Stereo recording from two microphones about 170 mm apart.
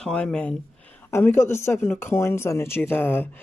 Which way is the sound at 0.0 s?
5° left (ahead or behind).